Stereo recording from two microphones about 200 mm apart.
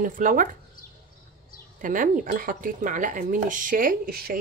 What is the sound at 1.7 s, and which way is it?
Speech, 40° right (ahead or behind).